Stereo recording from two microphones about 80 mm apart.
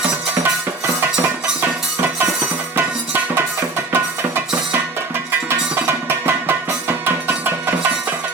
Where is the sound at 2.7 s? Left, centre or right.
Right.